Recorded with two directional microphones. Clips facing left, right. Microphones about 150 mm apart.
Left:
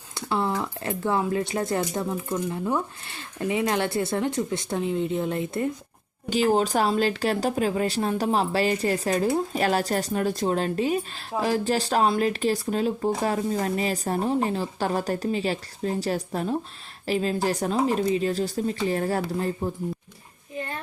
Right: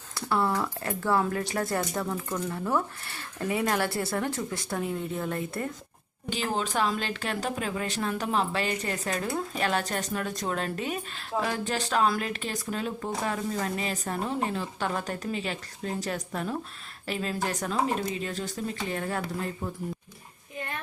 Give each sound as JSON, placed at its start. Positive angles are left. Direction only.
{"t": 0.1, "sound": "speech", "side_deg": 20}
{"t": 6.3, "sound": "speech", "side_deg": 40}